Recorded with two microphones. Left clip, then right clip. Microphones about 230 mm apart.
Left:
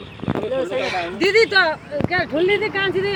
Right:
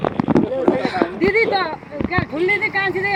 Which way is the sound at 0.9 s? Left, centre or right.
Left.